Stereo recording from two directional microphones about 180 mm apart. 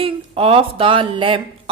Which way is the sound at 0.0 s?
30° right (ahead or behind).